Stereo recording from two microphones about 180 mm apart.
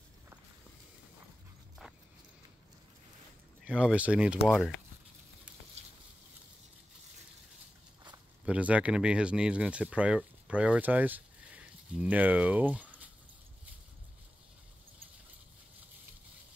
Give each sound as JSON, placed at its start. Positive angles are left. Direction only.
{"t": 3.6, "sound": "speech", "side_deg": -5}
{"t": 5.8, "sound": "a sound", "side_deg": -35}
{"t": 8.5, "sound": "speech", "side_deg": -5}